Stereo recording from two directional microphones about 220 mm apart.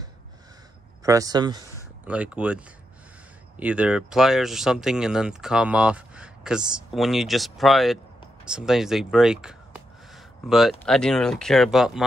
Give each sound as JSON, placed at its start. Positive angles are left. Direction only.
{"t": 1.0, "sound": "speech", "side_deg": -15}
{"t": 2.0, "sound": "speech", "side_deg": -5}